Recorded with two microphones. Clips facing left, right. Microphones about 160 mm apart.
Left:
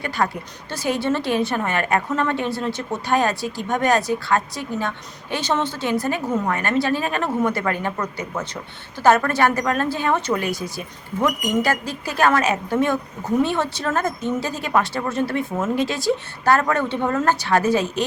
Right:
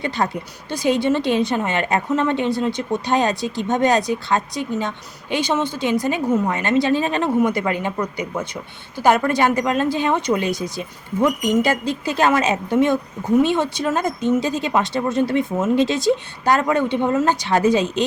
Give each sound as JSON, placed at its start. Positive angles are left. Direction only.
{"t": 0.2, "sound": "a woman's voice", "side_deg": -20}